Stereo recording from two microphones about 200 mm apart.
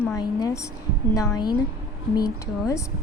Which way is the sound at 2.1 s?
15° left (ahead or behind).